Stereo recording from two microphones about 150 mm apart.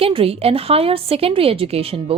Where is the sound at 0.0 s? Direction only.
40° right (ahead or behind).